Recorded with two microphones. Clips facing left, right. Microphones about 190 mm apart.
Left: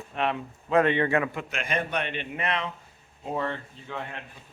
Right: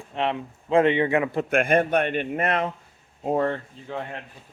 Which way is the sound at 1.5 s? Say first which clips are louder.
Right 14 dB; 55° right (ahead or behind).